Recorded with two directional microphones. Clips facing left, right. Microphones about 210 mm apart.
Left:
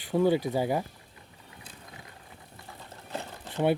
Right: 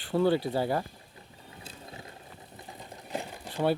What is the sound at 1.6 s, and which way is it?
Vehicle, 30° right (ahead or behind).